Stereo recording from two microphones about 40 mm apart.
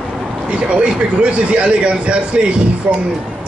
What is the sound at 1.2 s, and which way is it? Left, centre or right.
Speech, right.